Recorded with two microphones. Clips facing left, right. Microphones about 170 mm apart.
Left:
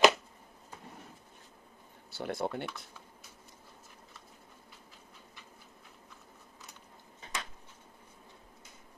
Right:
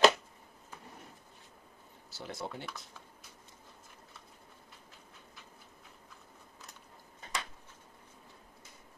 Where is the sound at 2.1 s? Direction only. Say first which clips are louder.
Left 7 dB; 60° left (ahead or behind).